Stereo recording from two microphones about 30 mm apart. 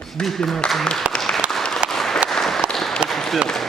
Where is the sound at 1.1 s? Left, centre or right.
Left.